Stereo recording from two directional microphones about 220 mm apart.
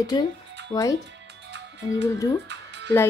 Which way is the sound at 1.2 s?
50° right (ahead or behind).